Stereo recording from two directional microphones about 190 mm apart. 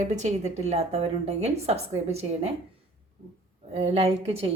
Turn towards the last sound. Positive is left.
turn(degrees=-30)  # may be behind; listen again after turning